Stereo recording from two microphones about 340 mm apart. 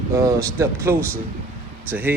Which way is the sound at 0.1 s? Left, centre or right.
Centre.